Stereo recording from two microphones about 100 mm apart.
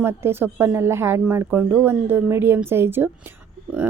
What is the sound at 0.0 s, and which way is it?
Speech, 25° right (ahead or behind).